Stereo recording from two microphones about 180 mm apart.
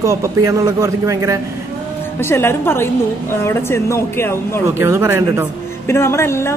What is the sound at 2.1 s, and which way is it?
A man's voice, 15° left (ahead or behind).